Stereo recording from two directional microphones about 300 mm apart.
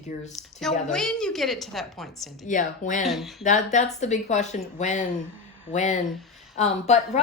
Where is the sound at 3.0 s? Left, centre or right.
Centre.